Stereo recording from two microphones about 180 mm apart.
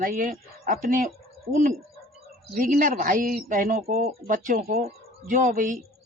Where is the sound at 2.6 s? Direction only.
50° right (ahead or behind).